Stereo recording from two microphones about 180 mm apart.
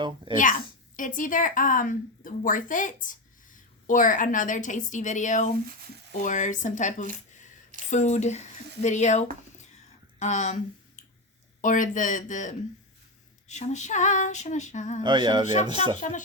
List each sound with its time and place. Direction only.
0.9 s speech: 45° left (ahead or behind)
13.5 s female singing: 40° left (ahead or behind)
15.0 s speech: 25° right (ahead or behind)
16.0 s speech: 40° left (ahead or behind)